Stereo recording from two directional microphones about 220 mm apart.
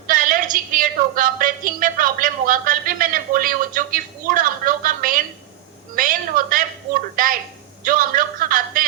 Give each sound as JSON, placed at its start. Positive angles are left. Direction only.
{"t": 0.1, "sound": "a woman's voice", "side_deg": -40}